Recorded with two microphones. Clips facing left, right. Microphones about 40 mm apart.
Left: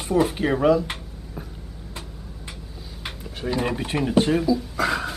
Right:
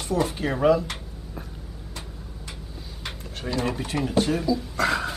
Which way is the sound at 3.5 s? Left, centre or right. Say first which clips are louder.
Left 2 dB; left.